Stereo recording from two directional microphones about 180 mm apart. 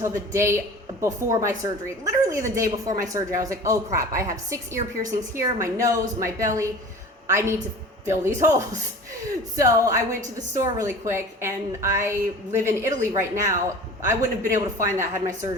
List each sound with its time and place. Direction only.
0.0 s a woman's voice: 15° right (ahead or behind)